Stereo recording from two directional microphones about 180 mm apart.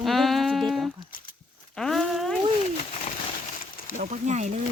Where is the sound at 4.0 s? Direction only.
40° right (ahead or behind).